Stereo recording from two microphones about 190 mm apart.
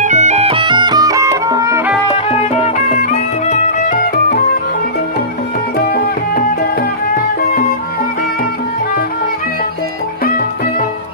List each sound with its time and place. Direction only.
0.0 s music: 40° right (ahead or behind); by 1.8 s 20° right (ahead or behind)
2.6 s music: 40° left (ahead or behind)
5.8 s music: 55° left (ahead or behind)